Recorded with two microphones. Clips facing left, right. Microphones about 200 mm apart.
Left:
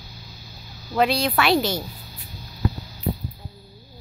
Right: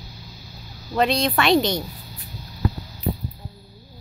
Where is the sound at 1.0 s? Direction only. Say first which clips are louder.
Even; 5° left (ahead or behind).